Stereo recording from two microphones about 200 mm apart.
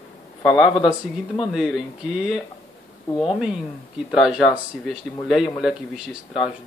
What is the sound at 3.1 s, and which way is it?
Speech, 25° left (ahead or behind).